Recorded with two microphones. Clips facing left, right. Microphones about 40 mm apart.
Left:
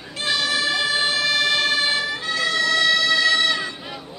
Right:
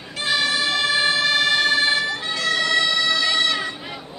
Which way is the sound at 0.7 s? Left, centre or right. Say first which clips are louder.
Right 2 dB; centre.